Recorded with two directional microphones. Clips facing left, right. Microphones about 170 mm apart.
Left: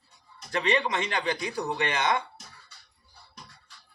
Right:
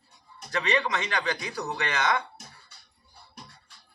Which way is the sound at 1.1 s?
25° left (ahead or behind).